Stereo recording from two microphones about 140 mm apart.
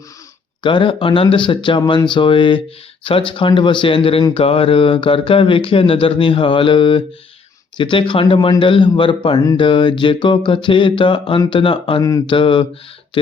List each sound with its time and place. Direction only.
0.6 s speech: 35° left (ahead or behind)